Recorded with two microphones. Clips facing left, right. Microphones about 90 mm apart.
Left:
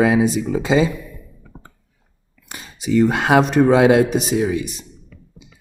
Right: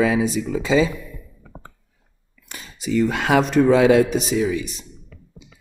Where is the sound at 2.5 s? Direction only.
60° left (ahead or behind).